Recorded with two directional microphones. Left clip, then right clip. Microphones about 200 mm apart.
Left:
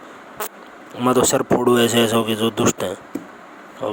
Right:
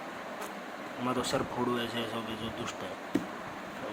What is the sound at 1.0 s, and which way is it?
Speech, 60° left (ahead or behind).